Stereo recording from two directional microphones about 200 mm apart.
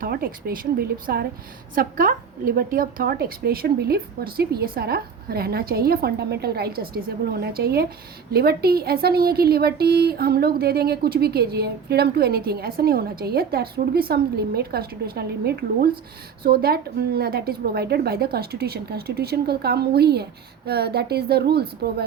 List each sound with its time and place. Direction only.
0.0 s a woman's voice: 45° right (ahead or behind)